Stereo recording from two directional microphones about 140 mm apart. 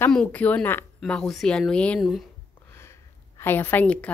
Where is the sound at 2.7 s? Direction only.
20° left (ahead or behind).